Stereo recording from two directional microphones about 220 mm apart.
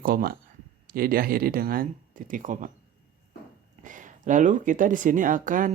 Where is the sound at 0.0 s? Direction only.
40° right (ahead or behind).